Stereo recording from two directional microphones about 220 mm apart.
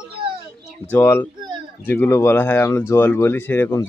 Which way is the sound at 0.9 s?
10° left (ahead or behind).